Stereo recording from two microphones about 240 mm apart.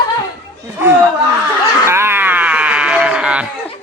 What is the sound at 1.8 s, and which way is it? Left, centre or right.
Sheep, centre.